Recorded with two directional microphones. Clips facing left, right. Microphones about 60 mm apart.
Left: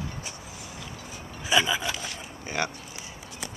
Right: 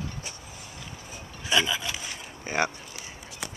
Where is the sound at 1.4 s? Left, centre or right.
Centre.